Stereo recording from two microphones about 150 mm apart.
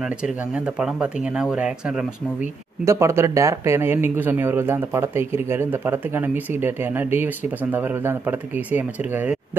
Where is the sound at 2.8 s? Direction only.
20° right (ahead or behind).